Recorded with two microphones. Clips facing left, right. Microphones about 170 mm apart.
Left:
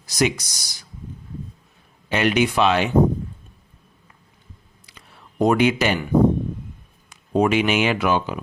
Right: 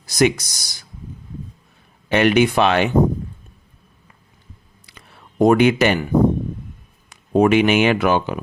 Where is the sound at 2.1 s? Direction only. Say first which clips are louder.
Right 4 dB; 55° right (ahead or behind).